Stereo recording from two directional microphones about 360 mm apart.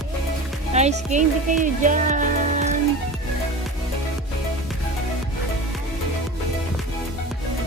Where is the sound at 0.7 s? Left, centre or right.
Centre.